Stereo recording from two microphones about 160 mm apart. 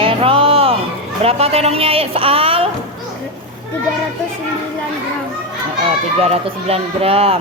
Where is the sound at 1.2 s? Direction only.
40° right (ahead or behind).